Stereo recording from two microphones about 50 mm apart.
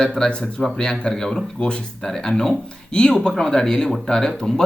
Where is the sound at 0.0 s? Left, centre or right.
Centre.